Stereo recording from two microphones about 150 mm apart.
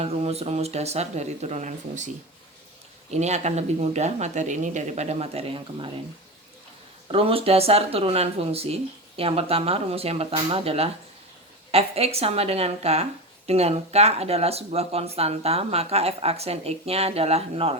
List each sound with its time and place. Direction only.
0.0 s speech: 45° right (ahead or behind)
3.1 s speech: 50° right (ahead or behind)
7.1 s speech: 40° right (ahead or behind)